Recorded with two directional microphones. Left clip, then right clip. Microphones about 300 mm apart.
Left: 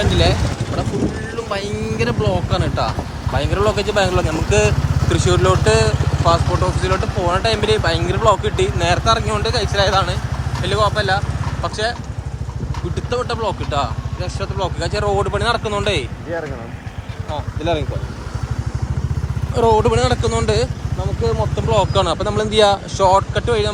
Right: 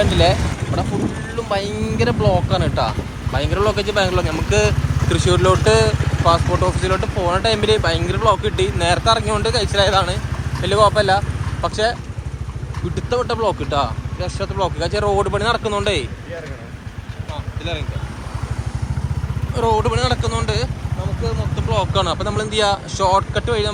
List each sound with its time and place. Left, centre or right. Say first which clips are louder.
0.1 s speech: right 2 dB; centre
1.5 s speech: right 3 dB; centre
13.1 s speech: right 2 dB; centre
17.6 s speech: left 7 dB; left
19.5 s speech: left 4 dB; centre